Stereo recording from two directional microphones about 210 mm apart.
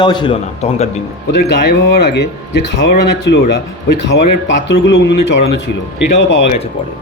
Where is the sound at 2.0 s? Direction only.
50° left (ahead or behind).